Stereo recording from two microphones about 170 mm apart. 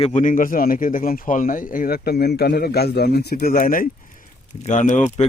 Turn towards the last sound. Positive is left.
turn(degrees=45)  # may be behind; listen again after turning